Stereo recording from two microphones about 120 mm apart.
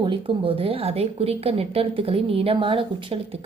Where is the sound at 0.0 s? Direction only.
45° right (ahead or behind).